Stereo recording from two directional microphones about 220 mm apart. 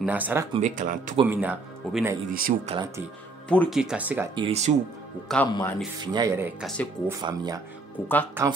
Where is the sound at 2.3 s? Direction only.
40° right (ahead or behind).